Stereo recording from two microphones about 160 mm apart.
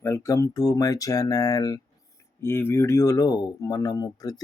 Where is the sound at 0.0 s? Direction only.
20° left (ahead or behind).